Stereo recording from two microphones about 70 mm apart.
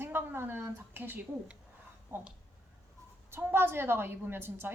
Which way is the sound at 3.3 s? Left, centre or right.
Right.